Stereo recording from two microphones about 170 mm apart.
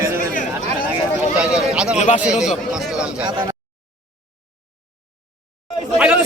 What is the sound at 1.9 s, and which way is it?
Speech, 45° left (ahead or behind).